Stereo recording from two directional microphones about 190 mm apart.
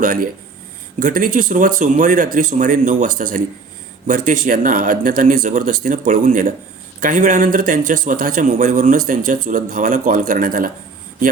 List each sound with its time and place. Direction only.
0.0 s a man's voice: 45° right (ahead or behind)